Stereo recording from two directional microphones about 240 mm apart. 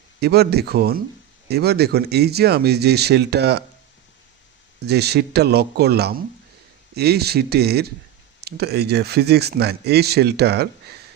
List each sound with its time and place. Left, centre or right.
0.2 s speech: right
4.9 s speech: right